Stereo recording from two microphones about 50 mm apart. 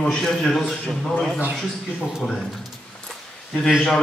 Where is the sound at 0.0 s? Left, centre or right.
Centre.